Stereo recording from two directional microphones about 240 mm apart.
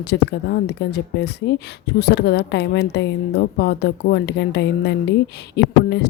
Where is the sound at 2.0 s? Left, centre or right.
Left.